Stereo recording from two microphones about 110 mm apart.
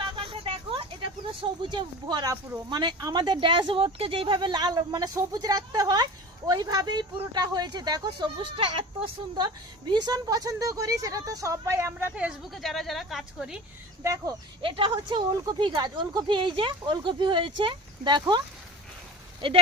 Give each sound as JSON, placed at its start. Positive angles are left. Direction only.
{"t": 0.2, "sound": "a sound", "side_deg": -55}
{"t": 1.4, "sound": "speech", "side_deg": -45}
{"t": 8.5, "sound": "speech", "side_deg": -55}
{"t": 9.9, "sound": "speech", "side_deg": -40}
{"t": 12.1, "sound": "speech", "side_deg": -5}
{"t": 14.0, "sound": "speech", "side_deg": -30}
{"t": 14.6, "sound": "speech", "side_deg": -50}
{"t": 14.9, "sound": "speech", "side_deg": -40}